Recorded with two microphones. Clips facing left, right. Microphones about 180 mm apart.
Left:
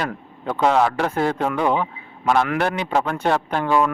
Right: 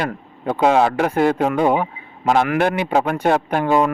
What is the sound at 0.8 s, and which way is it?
Speech, 15° right (ahead or behind).